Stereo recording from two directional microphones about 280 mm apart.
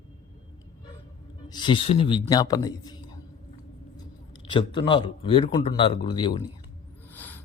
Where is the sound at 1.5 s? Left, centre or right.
Centre.